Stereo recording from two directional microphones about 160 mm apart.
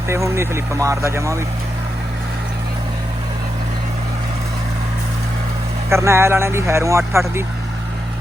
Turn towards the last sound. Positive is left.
turn(degrees=-20)  # may be behind; listen again after turning